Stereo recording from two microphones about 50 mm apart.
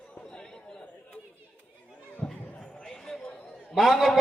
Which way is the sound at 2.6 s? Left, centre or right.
Centre.